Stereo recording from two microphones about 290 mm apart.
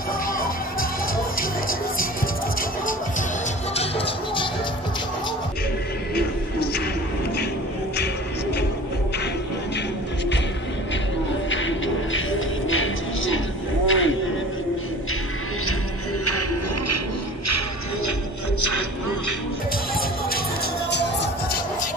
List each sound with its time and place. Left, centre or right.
0.3 s music: left
3.7 s music: centre
6.1 s music: left
11.5 s music: left
13.8 s a sound: left
16.3 s music: left
17.5 s music: left
18.6 s music: left
20.9 s music: left